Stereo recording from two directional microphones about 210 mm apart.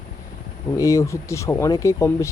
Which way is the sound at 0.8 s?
15° left (ahead or behind).